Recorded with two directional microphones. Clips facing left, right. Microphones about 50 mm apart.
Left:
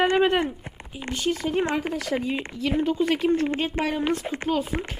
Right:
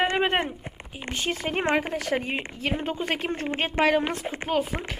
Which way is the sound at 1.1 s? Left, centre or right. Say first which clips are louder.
Left 3 dB; right.